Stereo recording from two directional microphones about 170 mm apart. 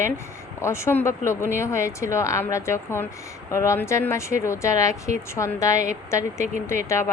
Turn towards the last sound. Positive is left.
turn(degrees=15)  # may be behind; listen again after turning